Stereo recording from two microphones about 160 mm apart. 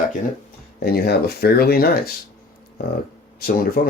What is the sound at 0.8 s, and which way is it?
Speech, 75° left (ahead or behind).